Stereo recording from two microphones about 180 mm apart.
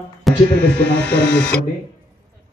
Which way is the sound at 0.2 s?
5° left (ahead or behind).